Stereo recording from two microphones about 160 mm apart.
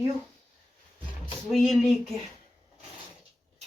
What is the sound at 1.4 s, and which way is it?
Speech, centre (ahead or behind).